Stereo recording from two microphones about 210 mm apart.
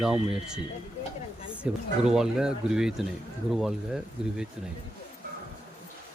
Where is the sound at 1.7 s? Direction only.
5° right (ahead or behind).